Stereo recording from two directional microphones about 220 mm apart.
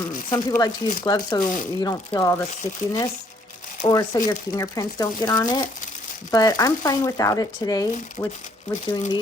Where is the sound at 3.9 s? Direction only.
15° left (ahead or behind).